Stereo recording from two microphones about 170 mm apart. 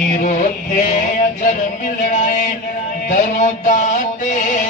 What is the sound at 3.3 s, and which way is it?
Music, 50° left (ahead or behind).